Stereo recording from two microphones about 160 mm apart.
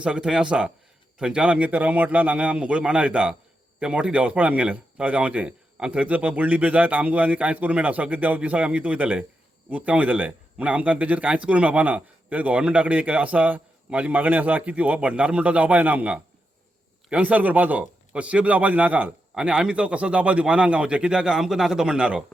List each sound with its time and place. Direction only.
0.0 s a man's voice: 5° right (ahead or behind)